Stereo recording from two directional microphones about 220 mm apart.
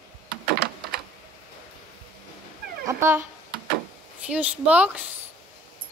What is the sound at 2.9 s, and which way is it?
Speech, 10° right (ahead or behind).